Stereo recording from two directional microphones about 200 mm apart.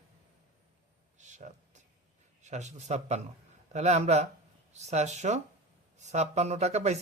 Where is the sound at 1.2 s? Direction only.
35° right (ahead or behind).